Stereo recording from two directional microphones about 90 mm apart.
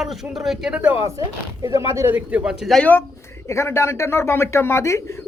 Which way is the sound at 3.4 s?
30° left (ahead or behind).